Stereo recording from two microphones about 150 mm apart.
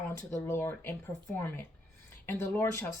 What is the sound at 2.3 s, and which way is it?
Speech, 10° left (ahead or behind).